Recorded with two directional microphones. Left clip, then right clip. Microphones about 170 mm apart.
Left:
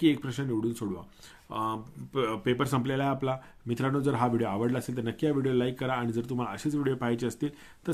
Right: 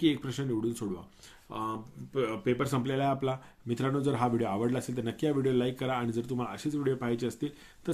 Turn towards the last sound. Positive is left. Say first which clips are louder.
# left 2 dB
turn(degrees=25)  # may be behind; listen again after turning